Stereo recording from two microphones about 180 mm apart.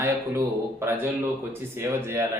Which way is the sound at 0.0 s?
15° right (ahead or behind).